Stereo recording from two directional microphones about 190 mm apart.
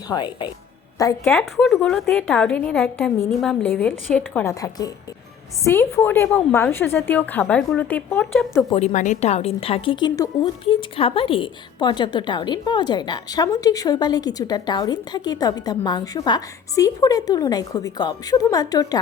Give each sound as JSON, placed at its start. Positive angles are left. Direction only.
{"t": 0.1, "sound": "a woman's voice", "side_deg": 25}
{"t": 1.4, "sound": "a woman's voice", "side_deg": 0}
{"t": 5.6, "sound": "a woman's voice", "side_deg": 10}
{"t": 8.7, "sound": "a woman's voice", "side_deg": 40}